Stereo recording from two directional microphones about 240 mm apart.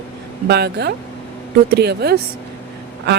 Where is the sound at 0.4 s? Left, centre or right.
Right.